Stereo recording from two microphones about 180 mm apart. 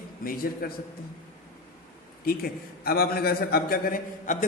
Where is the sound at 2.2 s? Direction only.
55° left (ahead or behind).